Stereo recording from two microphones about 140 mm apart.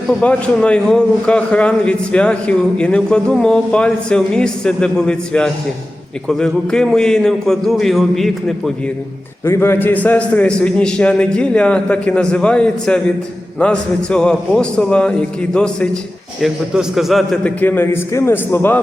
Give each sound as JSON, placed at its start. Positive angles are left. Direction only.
{"t": 0.1, "sound": "a man's voice", "side_deg": 5}
{"t": 9.4, "sound": "a man's voice", "side_deg": 15}
{"t": 17.6, "sound": "a man's voice", "side_deg": 15}